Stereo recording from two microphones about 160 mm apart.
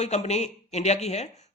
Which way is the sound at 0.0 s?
45° left (ahead or behind).